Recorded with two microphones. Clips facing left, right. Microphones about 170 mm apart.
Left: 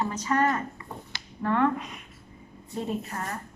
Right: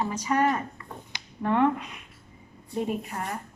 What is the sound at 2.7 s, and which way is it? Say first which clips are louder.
Speech: right 2 dB; 15° right (ahead or behind).